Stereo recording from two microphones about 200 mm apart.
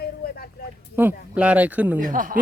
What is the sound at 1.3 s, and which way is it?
Speech, 5° right (ahead or behind).